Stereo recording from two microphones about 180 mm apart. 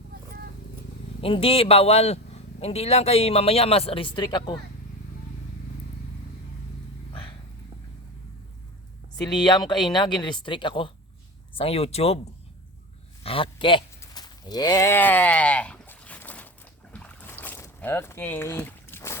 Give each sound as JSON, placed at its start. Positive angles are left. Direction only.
{"t": 1.2, "sound": "a man's voice", "side_deg": 30}
{"t": 7.1, "sound": "vehicle", "side_deg": 30}
{"t": 9.2, "sound": "a man's voice", "side_deg": 25}
{"t": 13.2, "sound": "a man's voice", "side_deg": 30}
{"t": 14.0, "sound": "sheep", "side_deg": 20}
{"t": 16.9, "sound": "boat", "side_deg": 10}